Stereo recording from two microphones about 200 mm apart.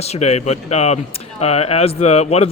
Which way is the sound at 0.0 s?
30° left (ahead or behind).